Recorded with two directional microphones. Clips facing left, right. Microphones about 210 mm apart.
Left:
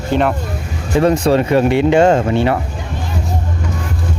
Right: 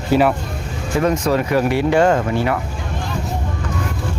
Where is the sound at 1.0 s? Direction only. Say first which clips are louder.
Left 5 dB; 30° left (ahead or behind).